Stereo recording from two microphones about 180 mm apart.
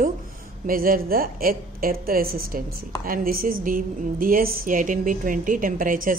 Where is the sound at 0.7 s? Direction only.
50° right (ahead or behind).